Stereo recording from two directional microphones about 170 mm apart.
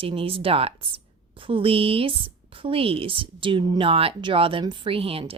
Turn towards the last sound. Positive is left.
turn(degrees=-35)  # may be behind; listen again after turning